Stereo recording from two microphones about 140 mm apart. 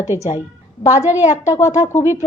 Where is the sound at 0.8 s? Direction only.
45° left (ahead or behind).